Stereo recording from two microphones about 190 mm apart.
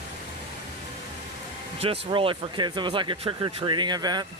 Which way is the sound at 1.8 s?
30° right (ahead or behind).